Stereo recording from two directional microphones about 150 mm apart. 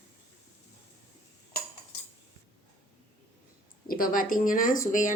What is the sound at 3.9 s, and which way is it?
Speech, 70° left (ahead or behind).